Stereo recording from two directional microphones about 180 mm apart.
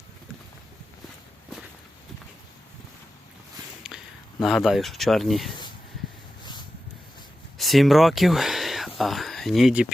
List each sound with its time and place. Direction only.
3.8 s speech: centre (ahead or behind)
6.4 s a sound: 25° left (ahead or behind)
7.6 s speech: centre (ahead or behind)